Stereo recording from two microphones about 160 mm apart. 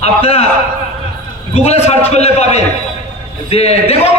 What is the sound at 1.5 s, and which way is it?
A man's voice, 40° left (ahead or behind).